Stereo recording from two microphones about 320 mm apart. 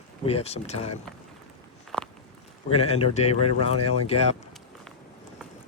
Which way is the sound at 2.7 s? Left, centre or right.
Centre.